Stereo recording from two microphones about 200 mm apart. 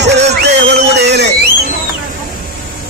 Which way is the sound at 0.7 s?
60° right (ahead or behind).